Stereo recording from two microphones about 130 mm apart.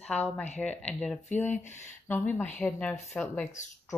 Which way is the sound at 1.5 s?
65° left (ahead or behind).